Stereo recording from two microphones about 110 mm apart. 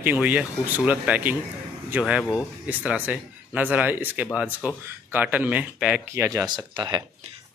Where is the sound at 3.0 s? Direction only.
15° right (ahead or behind).